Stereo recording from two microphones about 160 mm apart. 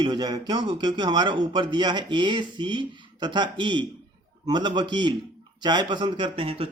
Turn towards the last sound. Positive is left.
turn(degrees=-35)  # may be behind; listen again after turning